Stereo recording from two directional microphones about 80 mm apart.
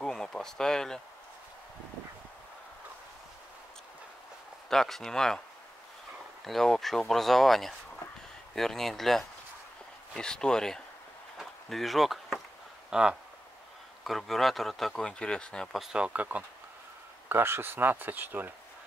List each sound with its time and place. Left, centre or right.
0.0 s a sound: centre
4.6 s speech: centre
6.4 s speech: centre
11.3 s a sound: centre
12.9 s speech: centre
14.0 s speech: centre
15.7 s speech: centre
17.3 s speech: right